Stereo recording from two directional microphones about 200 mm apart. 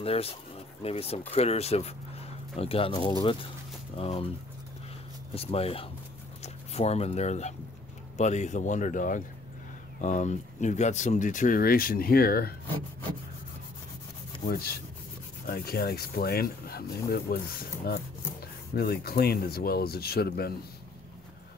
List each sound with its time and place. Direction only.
0.0 s speech: 30° left (ahead or behind)
5.3 s speech: 30° left (ahead or behind); by 12.5 s 50° left (ahead or behind)
14.5 s speech: 50° left (ahead or behind)